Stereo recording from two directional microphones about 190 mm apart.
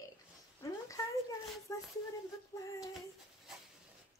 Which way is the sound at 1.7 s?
20° left (ahead or behind).